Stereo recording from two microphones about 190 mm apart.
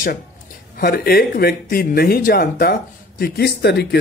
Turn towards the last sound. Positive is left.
turn(degrees=60)  # may be behind; listen again after turning